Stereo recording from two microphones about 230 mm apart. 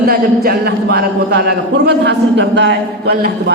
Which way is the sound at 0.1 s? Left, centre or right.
Right.